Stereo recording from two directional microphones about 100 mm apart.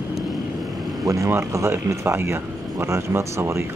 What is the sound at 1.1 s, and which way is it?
Speech, 30° right (ahead or behind).